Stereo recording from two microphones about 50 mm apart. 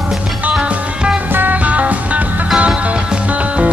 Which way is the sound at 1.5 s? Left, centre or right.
Right.